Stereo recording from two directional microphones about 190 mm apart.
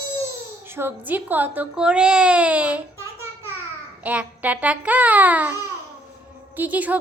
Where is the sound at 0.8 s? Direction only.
10° right (ahead or behind).